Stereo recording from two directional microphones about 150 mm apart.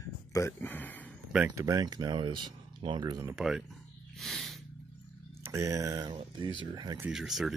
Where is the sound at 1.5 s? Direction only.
20° right (ahead or behind).